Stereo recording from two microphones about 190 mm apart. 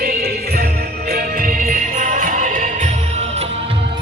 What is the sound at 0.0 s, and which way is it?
Music, 55° right (ahead or behind).